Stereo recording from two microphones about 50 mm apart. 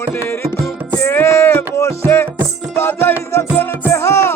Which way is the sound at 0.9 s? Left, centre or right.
Left.